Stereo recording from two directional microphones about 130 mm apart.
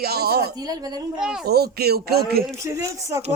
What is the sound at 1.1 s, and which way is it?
Speech, 5° right (ahead or behind).